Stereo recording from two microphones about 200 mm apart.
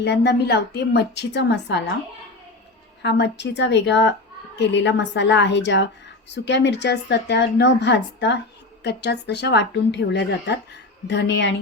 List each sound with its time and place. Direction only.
0.0 s speech: 55° left (ahead or behind)
3.0 s speech: 60° left (ahead or behind)